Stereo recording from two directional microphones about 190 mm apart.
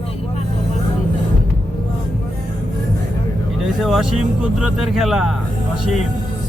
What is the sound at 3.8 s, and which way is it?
Speech, centre (ahead or behind).